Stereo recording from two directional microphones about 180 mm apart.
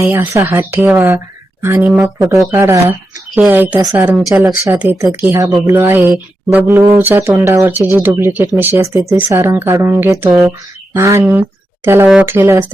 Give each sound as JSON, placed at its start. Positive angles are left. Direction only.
{"t": 0.0, "sound": "speech", "side_deg": -15}